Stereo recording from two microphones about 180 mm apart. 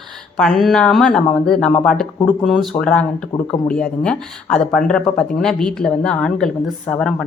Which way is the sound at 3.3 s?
25° left (ahead or behind).